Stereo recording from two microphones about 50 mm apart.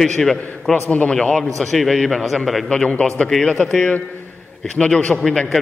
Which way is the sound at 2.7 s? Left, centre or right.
Left.